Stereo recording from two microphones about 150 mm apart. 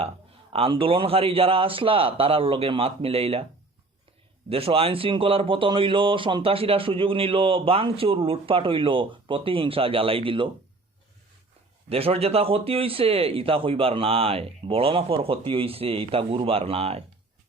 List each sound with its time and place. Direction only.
0.5 s speech: 40° right (ahead or behind)
4.4 s speech: 40° right (ahead or behind)
11.9 s speech: 40° right (ahead or behind)